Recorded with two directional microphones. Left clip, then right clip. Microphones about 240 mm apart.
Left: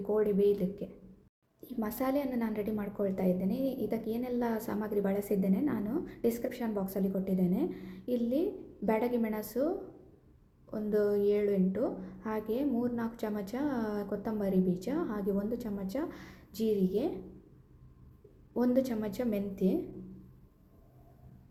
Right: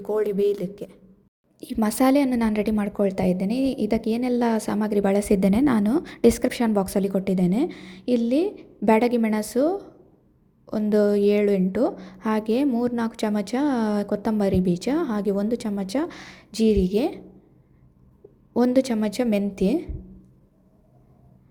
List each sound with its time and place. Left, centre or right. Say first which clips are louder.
0.0 s a woman's voice: right 6 dB; right
18.5 s a woman's voice: right 9 dB; right